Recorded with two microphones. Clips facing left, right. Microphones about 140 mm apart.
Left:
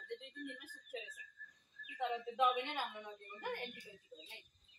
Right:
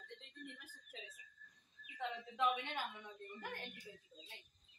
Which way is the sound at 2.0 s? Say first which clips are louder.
Left 5 dB; 20° left (ahead or behind).